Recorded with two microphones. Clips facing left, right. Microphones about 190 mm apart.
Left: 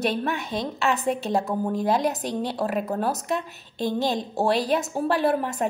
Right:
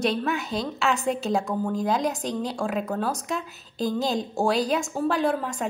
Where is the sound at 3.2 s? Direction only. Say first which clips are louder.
Left 3 dB; centre (ahead or behind).